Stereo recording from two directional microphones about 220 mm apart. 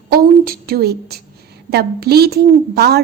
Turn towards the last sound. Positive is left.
turn(degrees=-45)  # may be behind; listen again after turning